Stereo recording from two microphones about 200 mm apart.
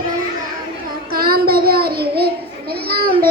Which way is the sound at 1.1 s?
50° right (ahead or behind).